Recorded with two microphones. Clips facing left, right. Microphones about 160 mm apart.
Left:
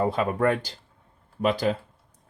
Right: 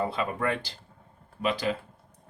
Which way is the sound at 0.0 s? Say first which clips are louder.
Left 6 dB; 45° left (ahead or behind).